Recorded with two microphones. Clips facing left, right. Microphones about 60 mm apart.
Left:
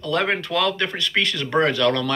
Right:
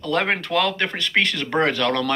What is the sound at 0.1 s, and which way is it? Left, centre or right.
Speech, right.